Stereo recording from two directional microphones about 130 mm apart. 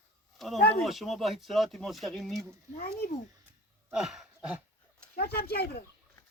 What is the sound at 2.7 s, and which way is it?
Speech, 75° left (ahead or behind).